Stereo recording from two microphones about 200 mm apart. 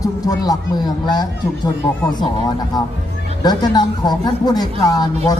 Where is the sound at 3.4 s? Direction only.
20° left (ahead or behind).